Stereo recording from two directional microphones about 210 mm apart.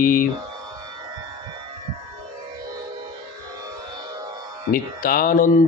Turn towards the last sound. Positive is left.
turn(degrees=45)  # may be behind; listen again after turning